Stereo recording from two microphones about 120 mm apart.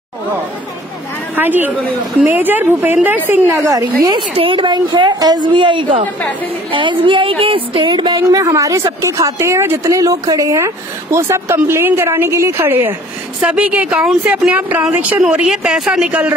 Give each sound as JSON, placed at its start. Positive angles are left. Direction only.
{"t": 1.3, "sound": "speech", "side_deg": -15}
{"t": 4.3, "sound": "a woman's voice", "side_deg": -50}